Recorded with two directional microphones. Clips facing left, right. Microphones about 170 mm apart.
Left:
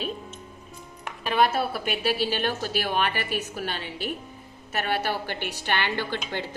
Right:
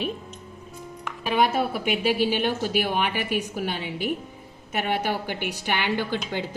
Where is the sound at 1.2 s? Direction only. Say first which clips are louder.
Right 1 dB; 15° right (ahead or behind).